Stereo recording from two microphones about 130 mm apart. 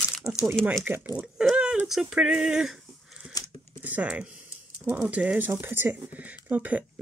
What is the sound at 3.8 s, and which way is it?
Speech, 10° right (ahead or behind).